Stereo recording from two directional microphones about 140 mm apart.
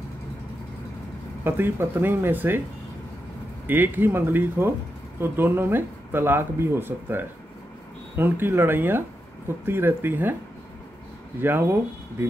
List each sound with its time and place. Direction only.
1.4 s speech: 15° right (ahead or behind)
3.6 s speech: 15° right (ahead or behind)
11.4 s speech: 15° right (ahead or behind)